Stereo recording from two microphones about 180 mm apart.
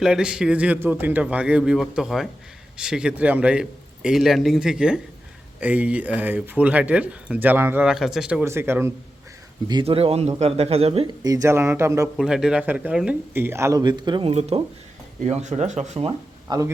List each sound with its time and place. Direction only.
0.0 s a man's voice: 5° right (ahead or behind)
9.6 s speech: 30° right (ahead or behind)
11.2 s speech: 20° right (ahead or behind)
12.1 s speech: 5° right (ahead or behind); by 16.7 s 20° right (ahead or behind)